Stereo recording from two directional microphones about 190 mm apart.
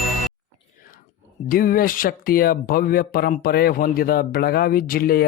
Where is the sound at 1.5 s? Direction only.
50° left (ahead or behind).